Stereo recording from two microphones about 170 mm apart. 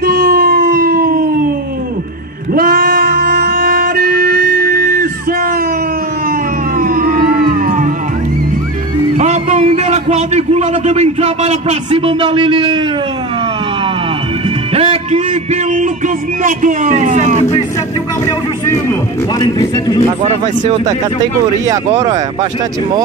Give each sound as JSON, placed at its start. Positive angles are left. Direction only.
{"t": 0.0, "sound": "music", "side_deg": -60}
{"t": 2.5, "sound": "music", "side_deg": -55}
{"t": 6.8, "sound": "music", "side_deg": -55}
{"t": 9.1, "sound": "a sound", "side_deg": -40}
{"t": 14.7, "sound": "music", "side_deg": -35}
{"t": 16.4, "sound": "a man's voice", "side_deg": -50}
{"t": 19.3, "sound": "speech", "side_deg": 20}